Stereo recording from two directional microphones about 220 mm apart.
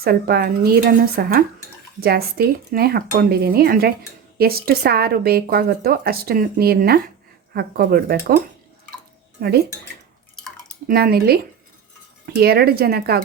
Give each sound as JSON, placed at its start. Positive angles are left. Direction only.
{"t": 0.0, "sound": "speech", "side_deg": -45}
{"t": 9.4, "sound": "speech", "side_deg": -45}
{"t": 10.8, "sound": "speech", "side_deg": -45}